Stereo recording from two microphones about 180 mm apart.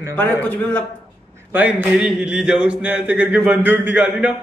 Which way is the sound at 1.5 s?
10° right (ahead or behind).